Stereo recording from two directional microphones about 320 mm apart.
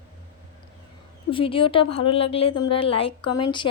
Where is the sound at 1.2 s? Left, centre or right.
Centre.